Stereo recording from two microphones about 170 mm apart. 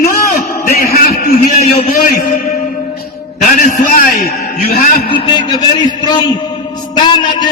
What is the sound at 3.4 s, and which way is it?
A man's voice, 50° left (ahead or behind).